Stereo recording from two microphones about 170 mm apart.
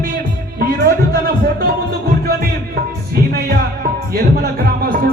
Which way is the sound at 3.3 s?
65° right (ahead or behind).